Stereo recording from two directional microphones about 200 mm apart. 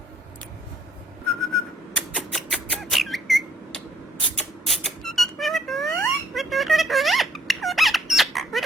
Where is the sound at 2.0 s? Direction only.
5° left (ahead or behind).